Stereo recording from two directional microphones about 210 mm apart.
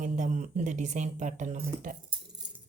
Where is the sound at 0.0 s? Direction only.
35° right (ahead or behind).